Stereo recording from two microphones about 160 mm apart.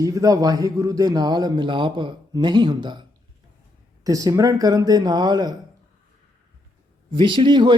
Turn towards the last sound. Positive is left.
turn(degrees=-30)  # may be behind; listen again after turning